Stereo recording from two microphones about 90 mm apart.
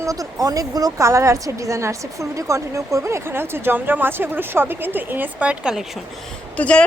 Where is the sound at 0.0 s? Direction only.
40° right (ahead or behind); by 5.8 s 10° right (ahead or behind).